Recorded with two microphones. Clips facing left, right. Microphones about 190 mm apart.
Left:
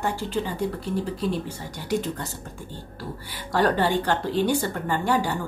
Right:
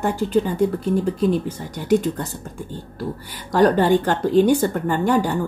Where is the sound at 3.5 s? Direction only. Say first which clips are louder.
Right 6 dB; 45° right (ahead or behind).